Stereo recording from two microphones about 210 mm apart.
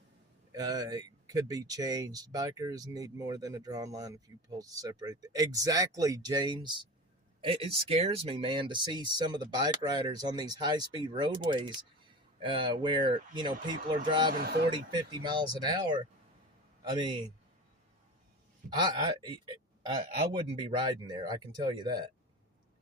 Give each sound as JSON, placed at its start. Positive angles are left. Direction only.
{"t": 0.5, "sound": "speech", "side_deg": -20}
{"t": 14.3, "sound": "speech", "side_deg": -50}
{"t": 14.7, "sound": "speech", "side_deg": -20}
{"t": 18.8, "sound": "speech", "side_deg": -20}